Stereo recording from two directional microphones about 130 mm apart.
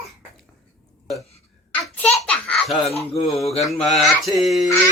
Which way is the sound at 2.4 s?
5° left (ahead or behind).